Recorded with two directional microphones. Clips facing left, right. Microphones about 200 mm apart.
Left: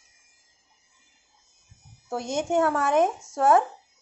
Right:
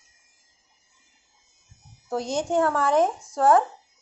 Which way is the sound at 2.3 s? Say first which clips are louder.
Even; 20° left (ahead or behind).